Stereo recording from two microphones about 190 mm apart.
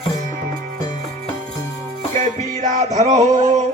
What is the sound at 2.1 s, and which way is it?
Music, 40° right (ahead or behind).